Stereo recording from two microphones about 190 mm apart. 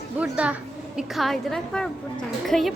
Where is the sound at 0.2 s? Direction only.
5° right (ahead or behind).